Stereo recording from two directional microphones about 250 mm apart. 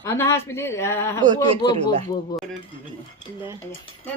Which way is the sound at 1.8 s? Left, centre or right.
Right.